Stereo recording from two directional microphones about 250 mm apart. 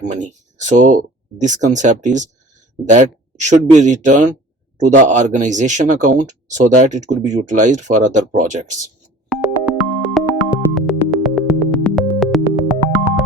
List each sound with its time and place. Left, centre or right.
0.0 s speech: right
9.3 s busy signal: centre
9.7 s sine wave: centre
10.2 s music: centre